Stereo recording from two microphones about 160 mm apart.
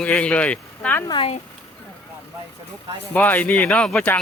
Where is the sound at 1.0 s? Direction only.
30° left (ahead or behind).